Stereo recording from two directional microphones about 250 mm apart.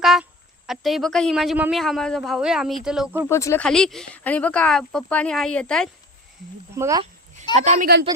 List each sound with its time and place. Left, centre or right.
0.0 s speech: centre
3.2 s speech: centre
6.7 s speech: centre
7.5 s a woman's voice: right